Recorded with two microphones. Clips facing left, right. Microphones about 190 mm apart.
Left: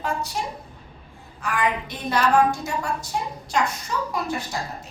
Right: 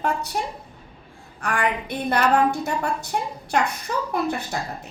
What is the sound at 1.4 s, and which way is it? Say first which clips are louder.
A woman's voice: even; 60° right (ahead or behind).